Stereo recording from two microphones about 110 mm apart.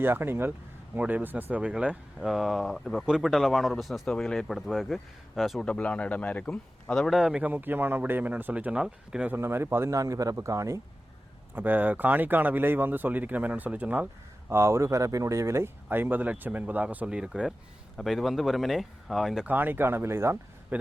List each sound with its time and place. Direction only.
0.0 s speech: 20° right (ahead or behind); by 7.2 s 5° left (ahead or behind)
7.2 s speech: 5° right (ahead or behind)
9.4 s speech: 20° right (ahead or behind)
11.5 s speech: 15° right (ahead or behind)
14.5 s speech: 25° right (ahead or behind); by 19.5 s centre (ahead or behind)
19.5 s speech: 15° right (ahead or behind)